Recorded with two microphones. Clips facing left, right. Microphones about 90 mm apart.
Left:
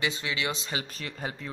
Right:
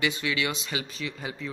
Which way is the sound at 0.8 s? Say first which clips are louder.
Right 1 dB; 45° left (ahead or behind).